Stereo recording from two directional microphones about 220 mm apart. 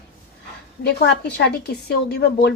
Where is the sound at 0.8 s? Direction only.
50° left (ahead or behind).